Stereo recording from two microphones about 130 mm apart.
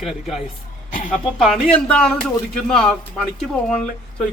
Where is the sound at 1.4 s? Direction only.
5° left (ahead or behind).